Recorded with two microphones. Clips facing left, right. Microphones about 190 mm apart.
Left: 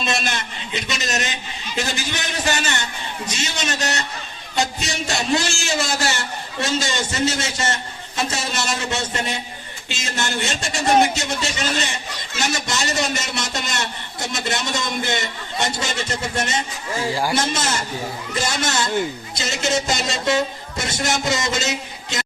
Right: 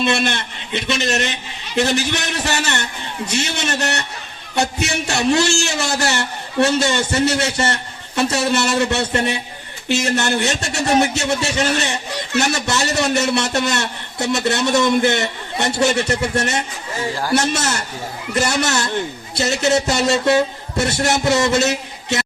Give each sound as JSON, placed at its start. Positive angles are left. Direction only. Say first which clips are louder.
{"t": 0.0, "sound": "a man's voice", "louder": "right 6 dB", "side_deg": -60}